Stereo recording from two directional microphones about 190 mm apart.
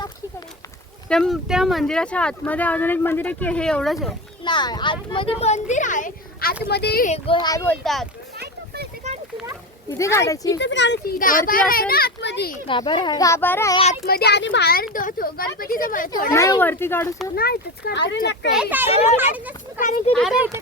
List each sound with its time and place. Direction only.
1.0 s speech: 5° left (ahead or behind)
4.4 s speech: 25° left (ahead or behind); by 7.1 s 55° left (ahead or behind)
7.4 s speech: 15° left (ahead or behind)
8.4 s a sound: 55° right (ahead or behind)
10.0 s speech: 15° left (ahead or behind)
10.6 s speech: 70° left (ahead or behind)
11.2 s a child's voice: 45° left (ahead or behind); by 12.5 s 60° left (ahead or behind)
12.6 s speech: 25° left (ahead or behind)
14.0 s a child's voice: 55° left (ahead or behind)
16.3 s speech: 15° left (ahead or behind)
17.3 s a child's voice: 55° left (ahead or behind)
18.5 s speech: 5° right (ahead or behind)
19.8 s speech: 40° left (ahead or behind)
20.1 s speech: centre (ahead or behind)